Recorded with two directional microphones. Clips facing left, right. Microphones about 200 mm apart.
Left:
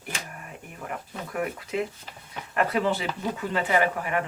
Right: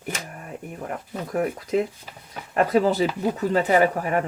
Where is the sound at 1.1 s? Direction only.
40° right (ahead or behind).